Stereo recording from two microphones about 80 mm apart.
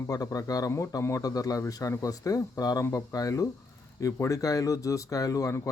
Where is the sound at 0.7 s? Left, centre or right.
Left.